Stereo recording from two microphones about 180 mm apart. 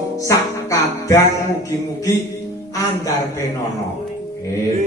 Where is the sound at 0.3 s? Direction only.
20° left (ahead or behind).